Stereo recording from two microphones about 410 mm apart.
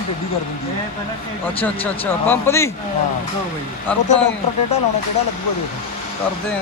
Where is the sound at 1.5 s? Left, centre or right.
Centre.